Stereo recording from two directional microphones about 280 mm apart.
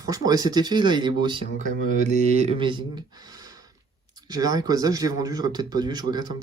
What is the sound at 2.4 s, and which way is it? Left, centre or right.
Speech, centre.